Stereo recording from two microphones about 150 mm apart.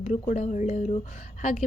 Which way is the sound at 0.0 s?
45° left (ahead or behind).